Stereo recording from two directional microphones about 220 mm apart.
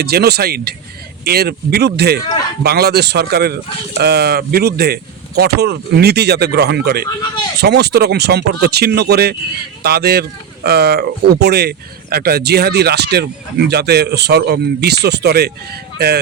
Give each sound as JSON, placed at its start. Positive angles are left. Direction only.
{"t": 0.0, "sound": "speech", "side_deg": -45}